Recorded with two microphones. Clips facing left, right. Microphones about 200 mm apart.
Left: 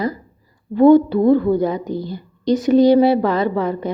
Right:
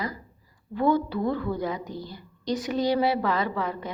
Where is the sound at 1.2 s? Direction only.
25° left (ahead or behind).